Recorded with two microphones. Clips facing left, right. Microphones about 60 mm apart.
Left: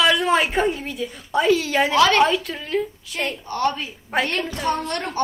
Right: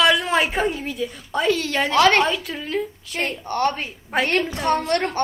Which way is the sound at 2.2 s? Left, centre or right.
Centre.